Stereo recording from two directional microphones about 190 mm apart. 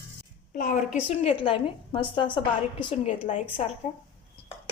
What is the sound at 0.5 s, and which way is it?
Speech, 45° left (ahead or behind).